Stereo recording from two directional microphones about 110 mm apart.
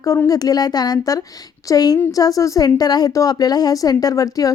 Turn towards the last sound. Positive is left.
turn(degrees=35)  # may be behind; listen again after turning